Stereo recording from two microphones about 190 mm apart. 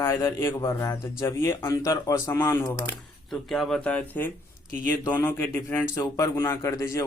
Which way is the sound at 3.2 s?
Centre (ahead or behind).